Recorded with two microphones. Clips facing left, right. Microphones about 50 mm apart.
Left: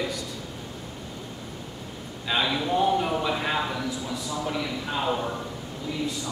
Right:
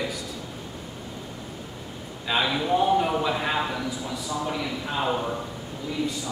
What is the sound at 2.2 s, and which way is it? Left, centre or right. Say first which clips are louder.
A man's voice: right 1 dB; centre.